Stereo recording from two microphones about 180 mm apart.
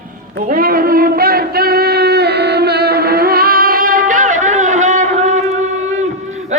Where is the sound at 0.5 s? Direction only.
55° right (ahead or behind).